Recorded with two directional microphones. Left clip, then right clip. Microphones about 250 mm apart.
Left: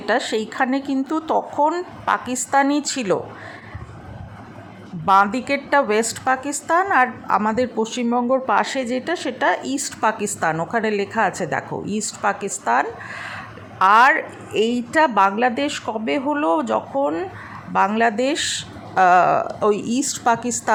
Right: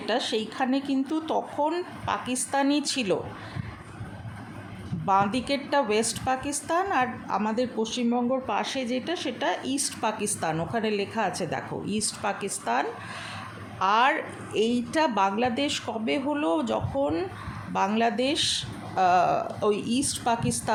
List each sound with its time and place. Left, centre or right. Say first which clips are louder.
0.0 s a woman's voice: left 6 dB; centre
5.0 s a woman's voice: left 8 dB; centre